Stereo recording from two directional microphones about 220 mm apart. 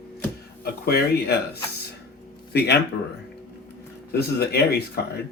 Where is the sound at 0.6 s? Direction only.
45° left (ahead or behind).